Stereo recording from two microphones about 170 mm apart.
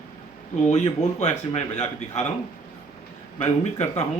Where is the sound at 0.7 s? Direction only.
40° left (ahead or behind).